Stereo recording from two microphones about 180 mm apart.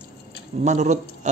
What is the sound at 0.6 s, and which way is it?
Speech, 40° right (ahead or behind).